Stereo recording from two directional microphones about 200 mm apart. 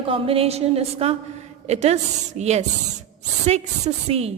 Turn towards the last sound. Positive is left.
turn(degrees=-30)  # may be behind; listen again after turning